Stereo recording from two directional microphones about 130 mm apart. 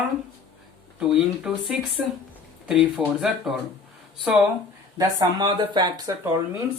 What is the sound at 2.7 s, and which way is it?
Speech, 5° right (ahead or behind).